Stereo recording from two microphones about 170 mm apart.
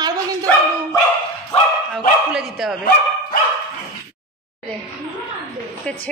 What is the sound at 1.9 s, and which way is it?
Speech, centre (ahead or behind).